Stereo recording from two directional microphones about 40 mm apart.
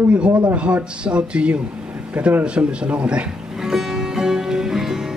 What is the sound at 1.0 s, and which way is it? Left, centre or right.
Speech, right.